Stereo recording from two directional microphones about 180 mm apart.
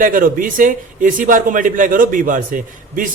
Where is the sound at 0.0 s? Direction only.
50° right (ahead or behind).